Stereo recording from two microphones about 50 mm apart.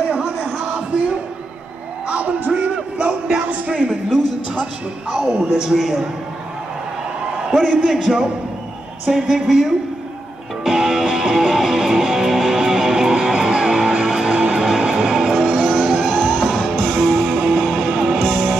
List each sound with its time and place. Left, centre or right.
0.1 s a sound: centre
2.0 s music: right
5.2 s speech: centre
7.8 s speech: centre
10.6 s music: centre
14.0 s music: centre